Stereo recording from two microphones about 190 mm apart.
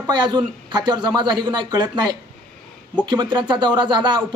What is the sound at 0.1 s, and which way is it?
Speech, 25° right (ahead or behind).